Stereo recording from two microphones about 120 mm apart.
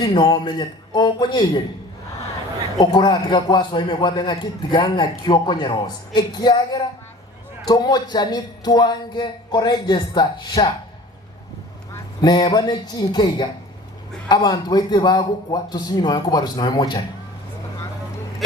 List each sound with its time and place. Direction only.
0.0 s a man's voice: 35° left (ahead or behind)
2.7 s a man's voice: 35° left (ahead or behind)
12.2 s a man's voice: 35° left (ahead or behind)